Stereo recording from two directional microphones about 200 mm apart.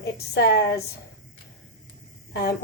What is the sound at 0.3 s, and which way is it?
Speech, 55° left (ahead or behind).